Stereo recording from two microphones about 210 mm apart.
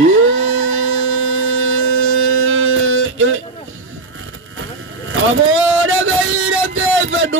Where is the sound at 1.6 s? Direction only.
75° right (ahead or behind).